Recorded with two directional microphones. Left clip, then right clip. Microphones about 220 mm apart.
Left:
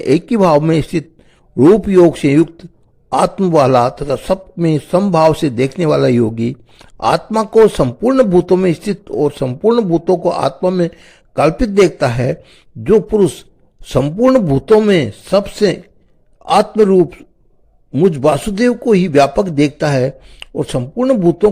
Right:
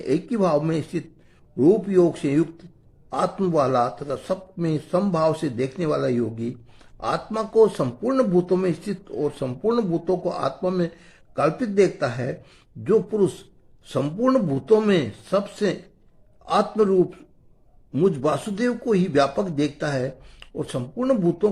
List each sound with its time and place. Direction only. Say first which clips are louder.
0.0 s a man's voice: left 10 dB; 40° left (ahead or behind)